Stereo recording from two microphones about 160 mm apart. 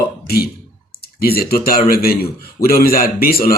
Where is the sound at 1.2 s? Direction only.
70° left (ahead or behind).